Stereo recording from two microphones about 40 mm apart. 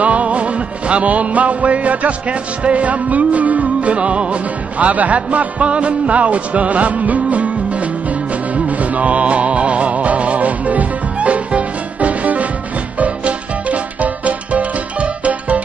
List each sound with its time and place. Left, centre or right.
0.0 s music: right